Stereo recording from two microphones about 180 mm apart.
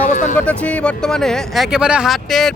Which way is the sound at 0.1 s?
45° left (ahead or behind).